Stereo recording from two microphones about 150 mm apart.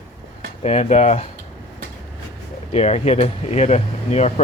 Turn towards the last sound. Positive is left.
turn(degrees=50)  # may be behind; listen again after turning